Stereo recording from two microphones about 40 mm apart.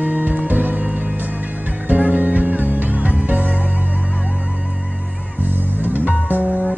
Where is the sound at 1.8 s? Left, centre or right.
Right.